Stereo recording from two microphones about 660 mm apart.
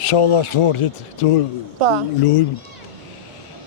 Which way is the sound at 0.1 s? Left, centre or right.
Left.